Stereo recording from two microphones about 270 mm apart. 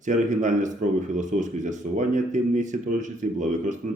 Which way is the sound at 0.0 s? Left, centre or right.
Right.